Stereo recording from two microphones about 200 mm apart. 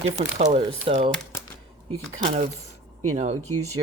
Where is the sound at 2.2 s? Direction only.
35° right (ahead or behind).